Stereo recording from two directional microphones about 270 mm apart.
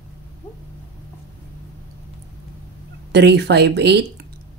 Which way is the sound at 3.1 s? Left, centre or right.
Right.